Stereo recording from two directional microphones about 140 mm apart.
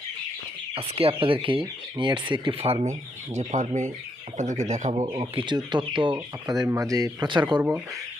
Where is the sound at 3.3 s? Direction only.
60° right (ahead or behind).